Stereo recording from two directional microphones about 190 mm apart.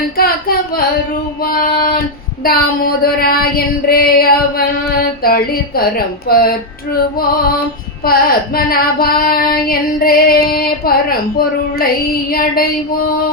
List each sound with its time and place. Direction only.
0.2 s singing: 50° left (ahead or behind)
1.4 s female singing: 50° left (ahead or behind)
8.0 s female singing: 50° left (ahead or behind)